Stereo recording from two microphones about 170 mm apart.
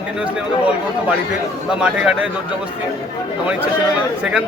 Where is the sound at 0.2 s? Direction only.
5° right (ahead or behind).